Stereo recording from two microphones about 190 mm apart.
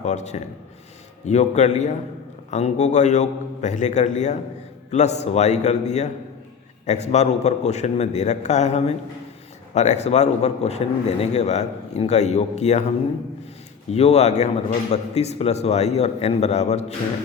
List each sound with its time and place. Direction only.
0.0 s a man's voice: 35° left (ahead or behind)
13.9 s a man's voice: 35° left (ahead or behind)